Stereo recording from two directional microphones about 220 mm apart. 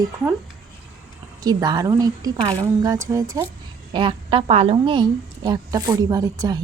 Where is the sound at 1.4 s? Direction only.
20° right (ahead or behind).